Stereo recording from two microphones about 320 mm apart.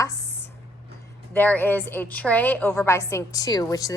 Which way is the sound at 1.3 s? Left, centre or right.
Centre.